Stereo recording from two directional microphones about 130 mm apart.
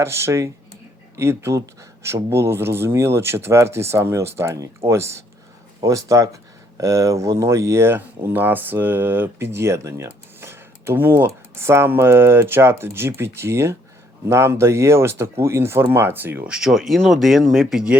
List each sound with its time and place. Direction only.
0.0 s speech: 20° right (ahead or behind); by 17.9 s 5° right (ahead or behind)